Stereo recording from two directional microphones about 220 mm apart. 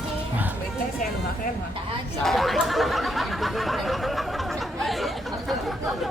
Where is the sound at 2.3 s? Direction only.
Centre (ahead or behind).